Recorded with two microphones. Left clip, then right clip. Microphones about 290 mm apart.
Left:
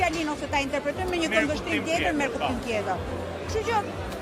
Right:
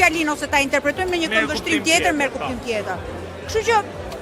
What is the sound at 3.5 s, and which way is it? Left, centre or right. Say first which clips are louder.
Speech: right 8 dB; right.